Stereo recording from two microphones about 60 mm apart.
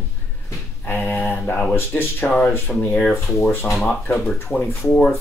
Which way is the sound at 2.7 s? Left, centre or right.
Centre.